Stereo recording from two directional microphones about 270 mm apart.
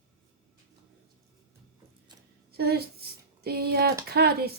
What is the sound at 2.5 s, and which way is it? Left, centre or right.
A woman's voice, right.